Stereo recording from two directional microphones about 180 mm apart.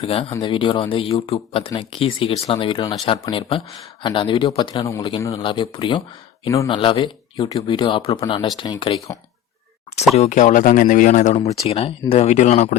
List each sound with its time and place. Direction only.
0.0 s speech: 35° left (ahead or behind)
10.2 s speech: 40° left (ahead or behind)
11.6 s speech: 35° left (ahead or behind)